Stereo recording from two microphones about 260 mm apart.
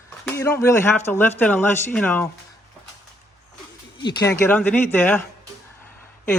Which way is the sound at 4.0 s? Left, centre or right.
Centre.